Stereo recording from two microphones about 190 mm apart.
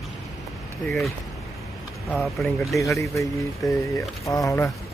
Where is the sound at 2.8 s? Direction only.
15° left (ahead or behind).